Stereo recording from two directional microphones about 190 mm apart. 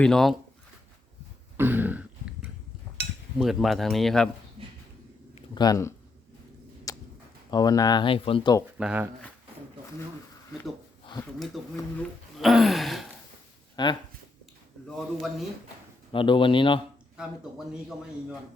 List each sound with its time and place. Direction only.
0.0 s speech: centre (ahead or behind)
1.5 s throat clearing: 10° right (ahead or behind)
3.0 s a sound: 60° right (ahead or behind)
3.3 s speech: centre (ahead or behind)
5.3 s speech: 20° left (ahead or behind)
6.9 s a sound: 15° left (ahead or behind)
7.5 s speech: 20° left (ahead or behind)
8.8 s speech: 5° right (ahead or behind)
11.2 s speech: centre (ahead or behind)
13.8 s speech: 25° left (ahead or behind)
14.8 s speech: centre (ahead or behind)
16.1 s speech: 25° left (ahead or behind)